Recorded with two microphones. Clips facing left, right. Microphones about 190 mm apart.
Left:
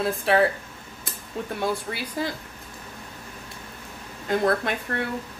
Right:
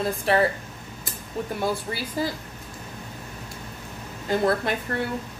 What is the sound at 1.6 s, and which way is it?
Speech, 5° right (ahead or behind).